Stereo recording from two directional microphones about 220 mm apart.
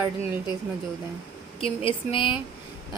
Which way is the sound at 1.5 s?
25° left (ahead or behind).